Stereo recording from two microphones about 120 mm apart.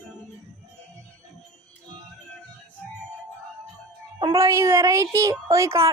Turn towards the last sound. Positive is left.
turn(degrees=-25)  # may be behind; listen again after turning